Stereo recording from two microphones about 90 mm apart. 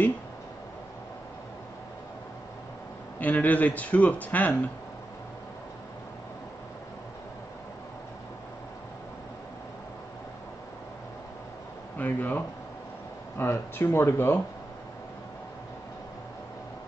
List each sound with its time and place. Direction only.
3.2 s speech: 20° left (ahead or behind)
12.0 s speech: 20° left (ahead or behind)